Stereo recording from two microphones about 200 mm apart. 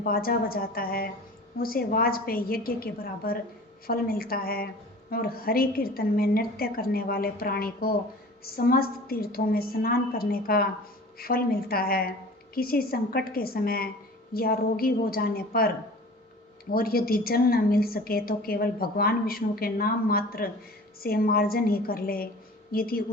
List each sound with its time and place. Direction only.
0.0 s a woman's voice: 50° left (ahead or behind)
16.7 s a woman's voice: 50° left (ahead or behind)